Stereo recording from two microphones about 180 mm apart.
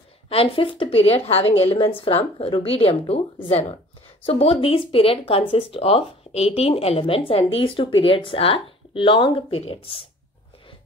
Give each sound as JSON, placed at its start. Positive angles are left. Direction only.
{"t": 0.3, "sound": "speech", "side_deg": 30}